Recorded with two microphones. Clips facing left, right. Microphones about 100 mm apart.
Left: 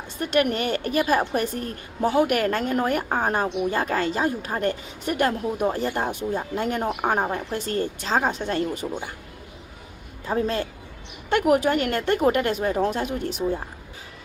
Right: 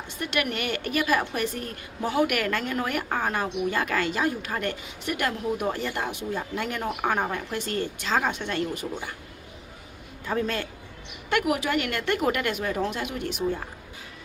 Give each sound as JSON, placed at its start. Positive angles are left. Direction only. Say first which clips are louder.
{"t": 0.2, "sound": "a woman's voice", "louder": "left 6 dB", "side_deg": 40}
{"t": 10.2, "sound": "a woman's voice", "louder": "left 3 dB", "side_deg": 30}